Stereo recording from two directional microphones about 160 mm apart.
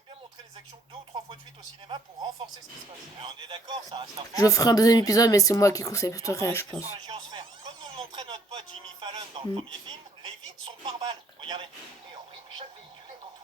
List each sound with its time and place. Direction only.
3.2 s speech: 30° right (ahead or behind)
4.4 s speech: 20° left (ahead or behind)
7.1 s speech: 30° right (ahead or behind)
10.8 s a man's voice: 30° right (ahead or behind)